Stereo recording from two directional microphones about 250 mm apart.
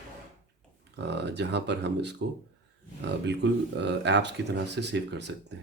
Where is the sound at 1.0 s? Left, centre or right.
Right.